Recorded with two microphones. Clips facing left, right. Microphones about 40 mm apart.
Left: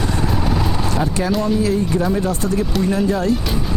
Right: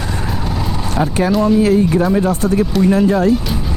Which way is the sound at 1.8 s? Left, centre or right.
Centre.